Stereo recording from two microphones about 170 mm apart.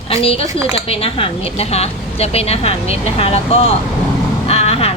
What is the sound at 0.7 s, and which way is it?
Speech, 35° left (ahead or behind).